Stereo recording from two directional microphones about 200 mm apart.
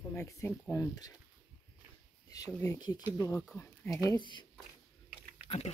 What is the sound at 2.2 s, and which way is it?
Speech, 20° left (ahead or behind).